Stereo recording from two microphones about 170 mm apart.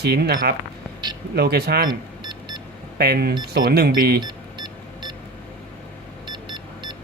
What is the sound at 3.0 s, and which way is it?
Speech, 65° right (ahead or behind).